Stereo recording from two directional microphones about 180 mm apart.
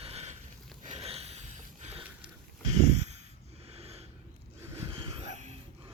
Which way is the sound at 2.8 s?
40° right (ahead or behind).